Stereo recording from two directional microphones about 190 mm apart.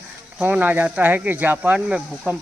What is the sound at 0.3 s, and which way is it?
Speech, 5° right (ahead or behind).